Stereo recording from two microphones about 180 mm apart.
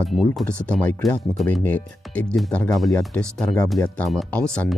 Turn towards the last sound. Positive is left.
turn(degrees=5)  # may be behind; listen again after turning